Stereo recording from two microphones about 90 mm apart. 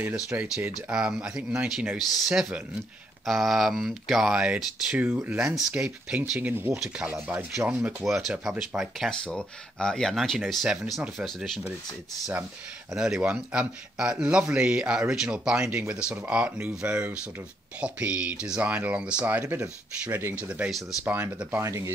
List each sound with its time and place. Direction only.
0.0 s a man's voice: 20° right (ahead or behind)
6.5 s a man's voice: 25° right (ahead or behind); by 9.1 s 5° right (ahead or behind)
9.1 s speech: 10° left (ahead or behind)
12.9 s a man's voice: 10° right (ahead or behind); by 20.4 s 25° right (ahead or behind)
20.4 s a man's voice: 15° right (ahead or behind)
21.5 s speech: 30° right (ahead or behind)